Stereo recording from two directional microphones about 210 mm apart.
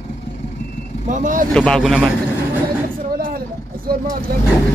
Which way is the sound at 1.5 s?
5° left (ahead or behind).